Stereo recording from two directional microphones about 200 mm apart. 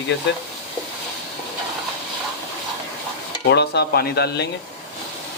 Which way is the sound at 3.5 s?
55° left (ahead or behind).